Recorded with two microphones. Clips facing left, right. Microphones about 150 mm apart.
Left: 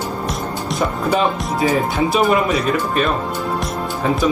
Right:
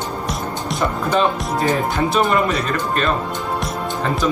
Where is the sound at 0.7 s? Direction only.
Centre (ahead or behind).